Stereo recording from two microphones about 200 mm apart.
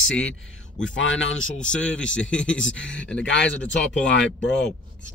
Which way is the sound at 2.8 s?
65° left (ahead or behind).